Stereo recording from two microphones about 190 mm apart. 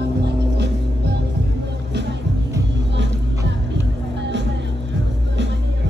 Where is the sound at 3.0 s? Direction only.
70° right (ahead or behind).